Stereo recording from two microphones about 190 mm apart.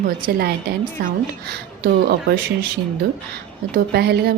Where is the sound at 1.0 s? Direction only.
55° right (ahead or behind).